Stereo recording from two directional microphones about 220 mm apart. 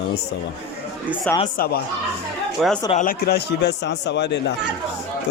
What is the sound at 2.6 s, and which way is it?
Speech, centre (ahead or behind).